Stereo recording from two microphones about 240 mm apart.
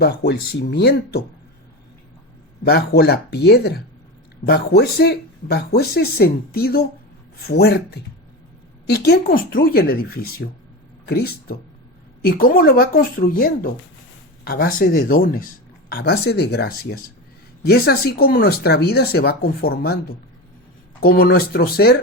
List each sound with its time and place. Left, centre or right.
0.0 s speech: left
2.6 s speech: left